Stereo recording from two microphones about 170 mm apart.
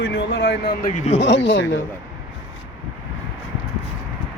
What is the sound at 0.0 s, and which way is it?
Speech, 90° left.